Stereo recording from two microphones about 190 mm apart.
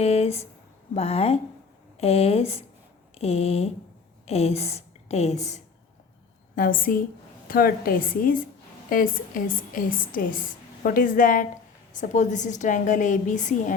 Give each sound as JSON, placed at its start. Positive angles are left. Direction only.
{"t": 0.0, "sound": "a woman's voice", "side_deg": 30}
{"t": 6.6, "sound": "a woman's voice", "side_deg": 45}